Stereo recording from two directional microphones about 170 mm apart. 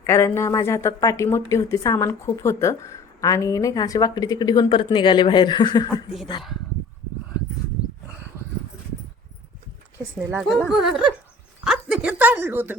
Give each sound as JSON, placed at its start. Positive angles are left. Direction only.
{"t": 0.0, "sound": "a woman's voice", "side_deg": 15}
{"t": 10.5, "sound": "speech", "side_deg": 0}